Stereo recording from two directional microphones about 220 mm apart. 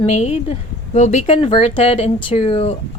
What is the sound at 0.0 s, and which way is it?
A woman's voice, 30° left (ahead or behind).